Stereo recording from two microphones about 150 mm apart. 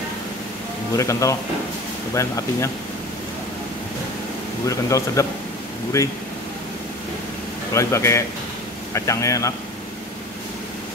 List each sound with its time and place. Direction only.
0.9 s speech: 20° left (ahead or behind)
4.6 s speech: 20° left (ahead or behind)
7.7 s speech: 20° left (ahead or behind)